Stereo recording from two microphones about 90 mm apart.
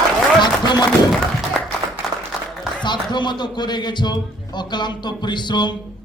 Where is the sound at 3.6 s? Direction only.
55° left (ahead or behind).